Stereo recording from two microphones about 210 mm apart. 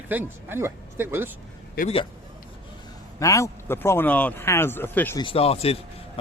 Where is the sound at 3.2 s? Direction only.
15° left (ahead or behind).